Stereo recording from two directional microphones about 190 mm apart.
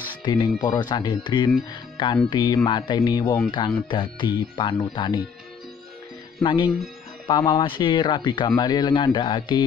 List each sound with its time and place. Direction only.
0.1 s music: 25° left (ahead or behind)
0.6 s speech: 25° left (ahead or behind)
6.4 s speech: 25° left (ahead or behind)